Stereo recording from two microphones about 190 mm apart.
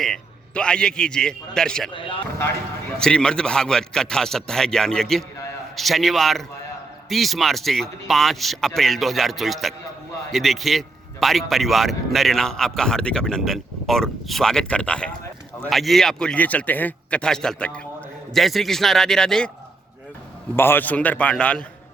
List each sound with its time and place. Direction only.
0.0 s a man's voice: 5° left (ahead or behind)
1.9 s speech: 25° left (ahead or behind)
3.0 s a man's voice: 5° left (ahead or behind)
20.6 s a man's voice: 10° left (ahead or behind)